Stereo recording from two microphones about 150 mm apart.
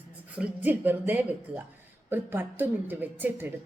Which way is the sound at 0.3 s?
10° right (ahead or behind).